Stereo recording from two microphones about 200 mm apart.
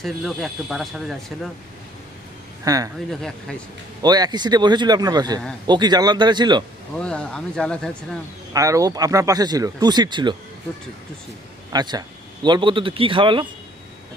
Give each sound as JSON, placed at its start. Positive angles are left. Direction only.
{"t": 0.0, "sound": "speech", "side_deg": 0}
{"t": 2.6, "sound": "speech", "side_deg": -15}
{"t": 4.0, "sound": "speech", "side_deg": -20}
{"t": 7.0, "sound": "speech", "side_deg": 5}
{"t": 8.5, "sound": "speech", "side_deg": -15}
{"t": 11.7, "sound": "speech", "side_deg": -20}